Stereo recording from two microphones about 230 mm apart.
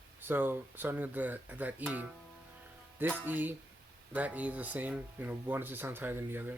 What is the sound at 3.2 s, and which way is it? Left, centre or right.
Speech, centre.